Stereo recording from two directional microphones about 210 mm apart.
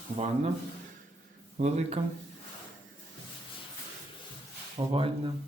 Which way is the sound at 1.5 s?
35° right (ahead or behind).